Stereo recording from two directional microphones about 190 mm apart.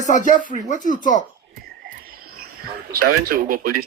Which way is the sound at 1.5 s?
50° right (ahead or behind).